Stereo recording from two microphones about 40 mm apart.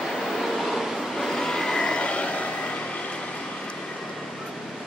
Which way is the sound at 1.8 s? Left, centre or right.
Left.